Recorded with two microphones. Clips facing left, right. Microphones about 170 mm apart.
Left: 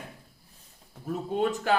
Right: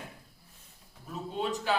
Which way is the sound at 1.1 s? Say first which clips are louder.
Left 6 dB; 50° left (ahead or behind).